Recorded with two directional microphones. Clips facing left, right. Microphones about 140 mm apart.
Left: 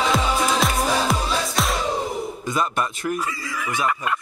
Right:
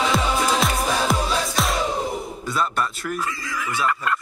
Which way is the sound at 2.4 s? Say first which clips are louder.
Even; 15° left (ahead or behind).